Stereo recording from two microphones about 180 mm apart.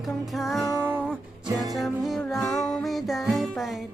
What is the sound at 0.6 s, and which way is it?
Music, 15° left (ahead or behind).